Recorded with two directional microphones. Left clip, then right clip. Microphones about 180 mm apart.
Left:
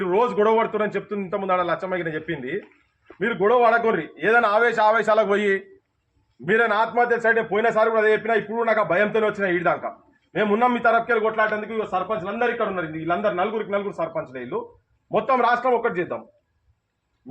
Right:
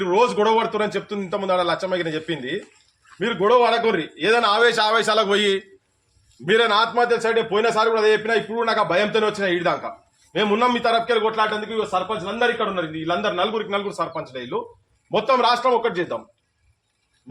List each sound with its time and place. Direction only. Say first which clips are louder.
0.0 s a man's voice: right 2 dB; 20° right (ahead or behind)